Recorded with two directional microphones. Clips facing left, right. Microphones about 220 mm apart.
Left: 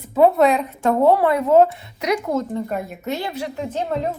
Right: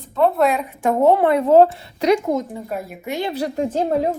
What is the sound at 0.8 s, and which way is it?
A woman's voice, 20° right (ahead or behind).